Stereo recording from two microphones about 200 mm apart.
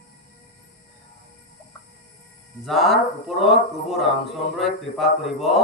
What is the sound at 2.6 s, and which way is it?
Speech, centre (ahead or behind).